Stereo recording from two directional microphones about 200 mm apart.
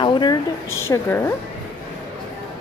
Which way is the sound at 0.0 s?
20° left (ahead or behind).